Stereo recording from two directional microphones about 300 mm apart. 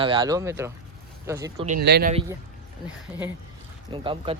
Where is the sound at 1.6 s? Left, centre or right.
Right.